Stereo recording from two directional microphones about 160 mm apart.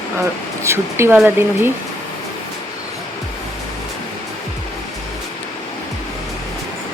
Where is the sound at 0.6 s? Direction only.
15° right (ahead or behind).